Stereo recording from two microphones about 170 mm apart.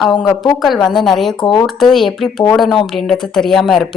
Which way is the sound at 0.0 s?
Centre (ahead or behind).